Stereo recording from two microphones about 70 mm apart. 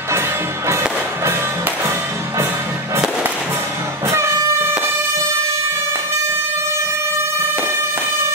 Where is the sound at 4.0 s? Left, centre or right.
Right.